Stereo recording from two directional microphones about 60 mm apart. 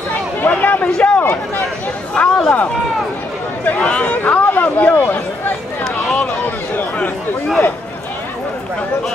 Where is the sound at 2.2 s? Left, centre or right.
Left.